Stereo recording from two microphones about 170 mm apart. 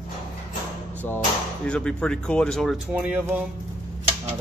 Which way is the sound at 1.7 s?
5° left (ahead or behind).